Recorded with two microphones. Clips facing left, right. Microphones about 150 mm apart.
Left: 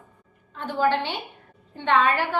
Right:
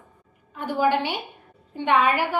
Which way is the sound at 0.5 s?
10° right (ahead or behind).